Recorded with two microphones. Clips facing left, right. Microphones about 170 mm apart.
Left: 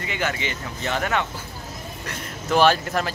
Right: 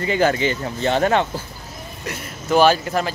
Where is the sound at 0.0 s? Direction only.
35° right (ahead or behind).